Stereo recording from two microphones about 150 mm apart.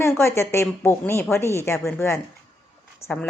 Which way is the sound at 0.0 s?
15° left (ahead or behind).